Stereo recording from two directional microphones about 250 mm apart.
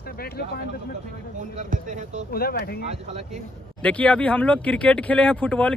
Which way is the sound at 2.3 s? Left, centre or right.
Left.